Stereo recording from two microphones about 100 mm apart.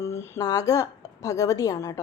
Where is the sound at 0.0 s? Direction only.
25° left (ahead or behind).